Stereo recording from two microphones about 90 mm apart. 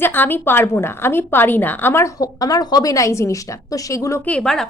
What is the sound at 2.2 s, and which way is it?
A woman's voice, 45° left (ahead or behind).